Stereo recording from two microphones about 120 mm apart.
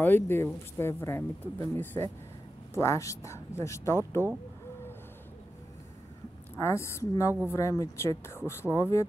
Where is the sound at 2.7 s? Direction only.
25° left (ahead or behind).